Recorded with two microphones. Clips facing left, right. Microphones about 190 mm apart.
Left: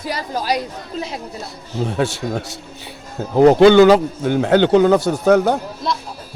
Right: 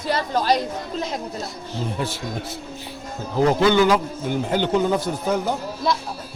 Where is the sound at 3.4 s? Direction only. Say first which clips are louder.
Left 8 dB; 75° left (ahead or behind).